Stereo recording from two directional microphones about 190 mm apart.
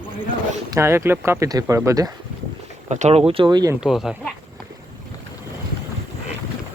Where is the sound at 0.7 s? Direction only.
15° right (ahead or behind).